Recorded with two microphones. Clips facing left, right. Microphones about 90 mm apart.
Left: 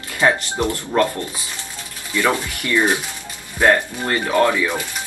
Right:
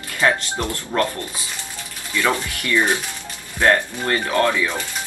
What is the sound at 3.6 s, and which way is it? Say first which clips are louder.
Speech: left 1 dB; 15° left (ahead or behind).